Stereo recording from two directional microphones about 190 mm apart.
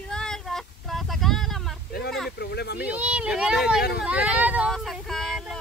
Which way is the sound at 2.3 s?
60° left (ahead or behind).